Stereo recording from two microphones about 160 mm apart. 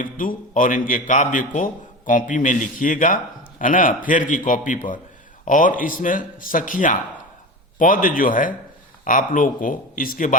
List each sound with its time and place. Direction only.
0.0 s a man's voice: 60° left (ahead or behind)